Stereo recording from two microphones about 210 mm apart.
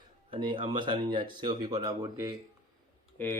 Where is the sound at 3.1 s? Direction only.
10° left (ahead or behind).